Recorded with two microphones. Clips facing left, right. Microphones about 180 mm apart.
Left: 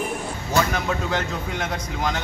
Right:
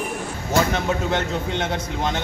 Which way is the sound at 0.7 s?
25° right (ahead or behind).